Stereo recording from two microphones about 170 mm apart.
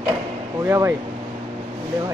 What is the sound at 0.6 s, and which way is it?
Speech, 15° right (ahead or behind).